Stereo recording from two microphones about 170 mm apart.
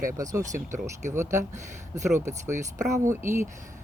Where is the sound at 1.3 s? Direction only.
45° right (ahead or behind).